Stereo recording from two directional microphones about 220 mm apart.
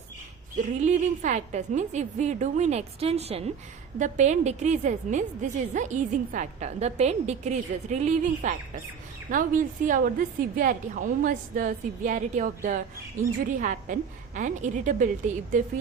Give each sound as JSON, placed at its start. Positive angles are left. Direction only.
{"t": 0.5, "sound": "a woman's voice", "side_deg": -35}